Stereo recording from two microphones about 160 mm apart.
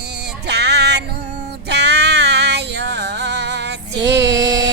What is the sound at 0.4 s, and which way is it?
Music, 90° right.